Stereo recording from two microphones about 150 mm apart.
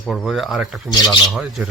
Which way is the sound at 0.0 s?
Centre (ahead or behind).